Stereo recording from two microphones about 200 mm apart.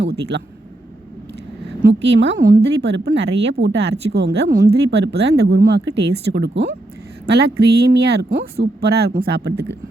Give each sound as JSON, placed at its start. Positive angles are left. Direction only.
{"t": 0.0, "sound": "speech", "side_deg": -60}
{"t": 1.9, "sound": "speech", "side_deg": -65}